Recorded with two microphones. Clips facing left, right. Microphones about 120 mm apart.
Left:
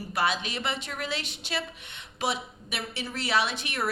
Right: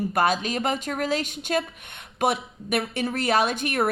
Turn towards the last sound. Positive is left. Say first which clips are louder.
# right 7 dB
turn(degrees=-50)  # may be behind; listen again after turning